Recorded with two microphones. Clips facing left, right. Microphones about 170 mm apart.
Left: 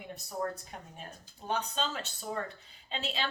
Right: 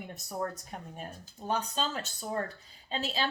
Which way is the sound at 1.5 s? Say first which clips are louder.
Right 1 dB; 40° right (ahead or behind).